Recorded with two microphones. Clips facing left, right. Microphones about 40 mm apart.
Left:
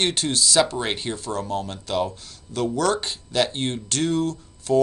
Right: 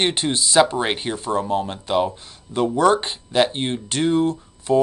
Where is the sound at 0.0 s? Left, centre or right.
Right.